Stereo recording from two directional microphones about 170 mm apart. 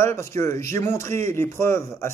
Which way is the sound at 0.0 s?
15° left (ahead or behind).